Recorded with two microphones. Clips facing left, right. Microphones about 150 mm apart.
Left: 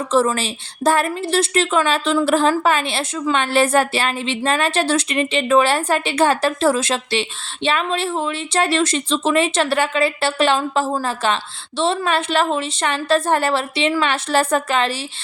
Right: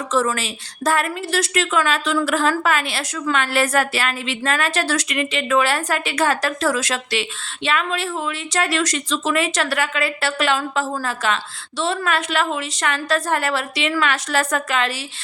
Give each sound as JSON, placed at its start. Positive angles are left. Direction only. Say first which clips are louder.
{"t": 0.1, "sound": "a woman's voice", "louder": "left 3 dB", "side_deg": 30}